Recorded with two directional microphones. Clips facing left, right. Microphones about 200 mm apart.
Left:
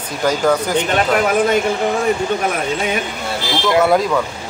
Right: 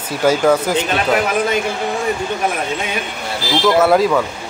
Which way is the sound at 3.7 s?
Centre (ahead or behind).